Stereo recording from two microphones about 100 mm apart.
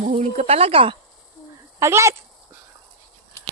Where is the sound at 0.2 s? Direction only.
85° right; by 0.9 s 70° right (ahead or behind).